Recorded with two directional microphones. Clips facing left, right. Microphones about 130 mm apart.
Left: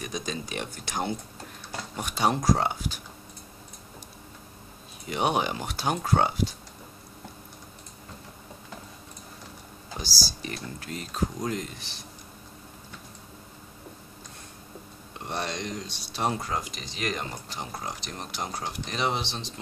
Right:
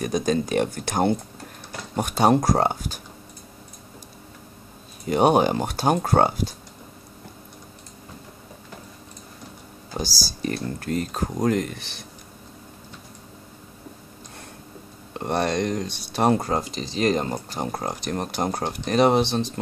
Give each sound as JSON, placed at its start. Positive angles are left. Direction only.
{"t": 0.0, "sound": "speech", "side_deg": -50}
{"t": 5.0, "sound": "speech", "side_deg": -45}
{"t": 9.9, "sound": "speech", "side_deg": -45}
{"t": 15.1, "sound": "speech", "side_deg": -50}
{"t": 16.4, "sound": "speech", "side_deg": -35}